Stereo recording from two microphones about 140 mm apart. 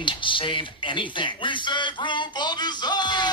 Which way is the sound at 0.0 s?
35° left (ahead or behind).